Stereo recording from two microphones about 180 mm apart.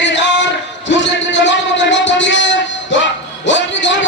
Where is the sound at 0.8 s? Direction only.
85° left.